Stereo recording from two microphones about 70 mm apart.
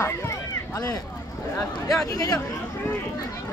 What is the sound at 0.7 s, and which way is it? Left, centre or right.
Speech, left.